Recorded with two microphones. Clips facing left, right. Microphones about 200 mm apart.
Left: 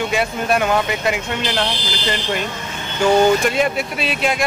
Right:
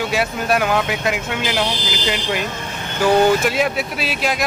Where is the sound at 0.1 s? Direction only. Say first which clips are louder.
Even; centre (ahead or behind).